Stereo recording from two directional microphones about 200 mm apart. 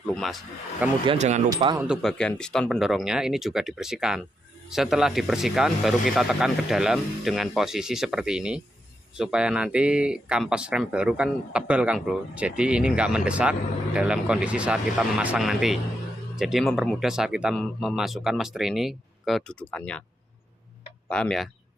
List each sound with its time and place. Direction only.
0.1 s speech: centre (ahead or behind)
1.0 s speech: 30° right (ahead or behind)
1.8 s speech: centre (ahead or behind)
21.1 s speech: 5° left (ahead or behind)